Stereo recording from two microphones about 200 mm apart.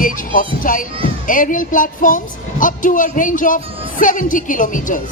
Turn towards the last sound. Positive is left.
turn(degrees=40)  # may be behind; listen again after turning